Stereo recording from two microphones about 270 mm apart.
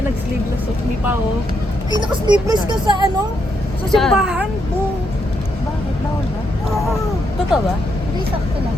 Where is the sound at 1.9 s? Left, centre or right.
Centre.